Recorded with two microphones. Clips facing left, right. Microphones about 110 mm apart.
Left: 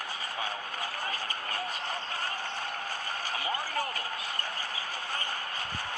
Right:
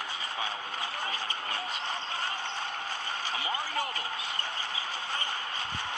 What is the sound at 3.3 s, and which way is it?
Speech, 45° left (ahead or behind).